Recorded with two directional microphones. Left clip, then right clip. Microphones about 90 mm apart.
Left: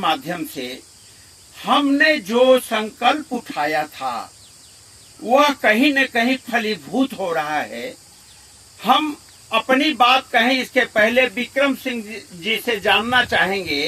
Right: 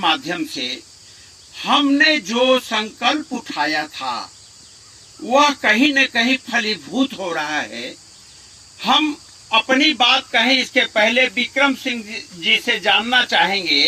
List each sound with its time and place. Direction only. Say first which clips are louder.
0.0 s speech: right 2 dB; 30° left (ahead or behind)